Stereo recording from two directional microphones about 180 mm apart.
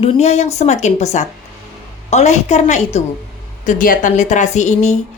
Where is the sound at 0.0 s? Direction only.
35° left (ahead or behind).